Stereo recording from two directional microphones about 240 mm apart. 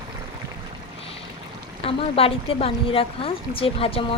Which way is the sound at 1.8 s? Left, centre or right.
Left.